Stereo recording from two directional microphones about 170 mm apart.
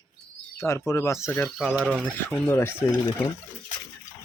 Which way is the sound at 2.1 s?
10° left (ahead or behind).